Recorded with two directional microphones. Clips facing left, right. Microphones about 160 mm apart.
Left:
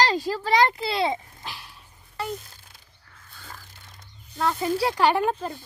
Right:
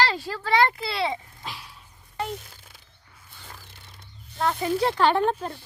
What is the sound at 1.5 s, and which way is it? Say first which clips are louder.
Dog: right 1 dB; centre (ahead or behind).